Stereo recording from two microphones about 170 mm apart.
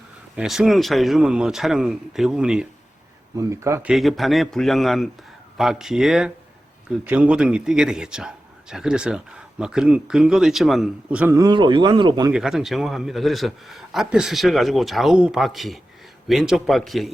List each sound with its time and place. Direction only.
0.3 s a man's voice: centre (ahead or behind)
3.3 s speech: 15° right (ahead or behind)
3.8 s a man's voice: centre (ahead or behind)
11.3 s speech: 25° right (ahead or behind)
12.3 s a man's voice: 5° right (ahead or behind)